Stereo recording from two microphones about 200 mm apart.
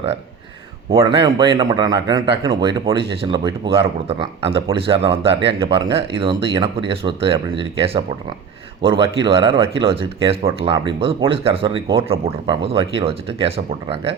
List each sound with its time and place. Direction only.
0.9 s speech: 25° right (ahead or behind)